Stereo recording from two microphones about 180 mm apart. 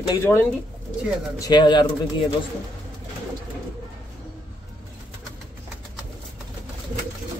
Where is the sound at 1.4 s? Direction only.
25° left (ahead or behind).